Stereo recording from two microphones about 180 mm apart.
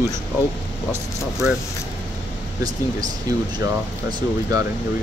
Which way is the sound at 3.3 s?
20° right (ahead or behind).